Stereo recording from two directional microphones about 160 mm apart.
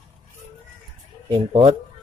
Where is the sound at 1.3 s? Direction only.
30° right (ahead or behind).